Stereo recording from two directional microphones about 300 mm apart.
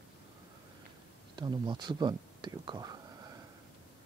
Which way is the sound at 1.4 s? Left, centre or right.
Centre.